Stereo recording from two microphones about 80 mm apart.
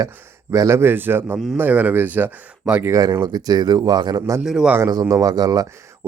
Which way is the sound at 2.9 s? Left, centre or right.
Right.